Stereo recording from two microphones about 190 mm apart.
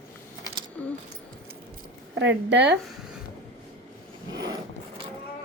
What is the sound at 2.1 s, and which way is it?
Speech, 65° right (ahead or behind).